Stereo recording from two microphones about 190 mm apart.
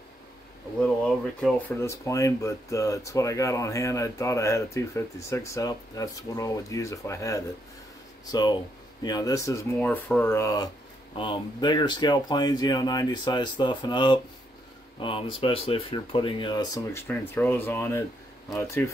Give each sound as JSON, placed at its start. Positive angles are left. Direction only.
{"t": 1.8, "sound": "speech", "side_deg": 15}